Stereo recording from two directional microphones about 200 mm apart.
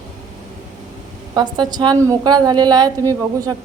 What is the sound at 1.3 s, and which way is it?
A woman's voice, 20° right (ahead or behind).